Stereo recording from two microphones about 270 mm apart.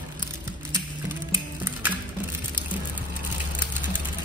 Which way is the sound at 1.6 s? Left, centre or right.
Centre.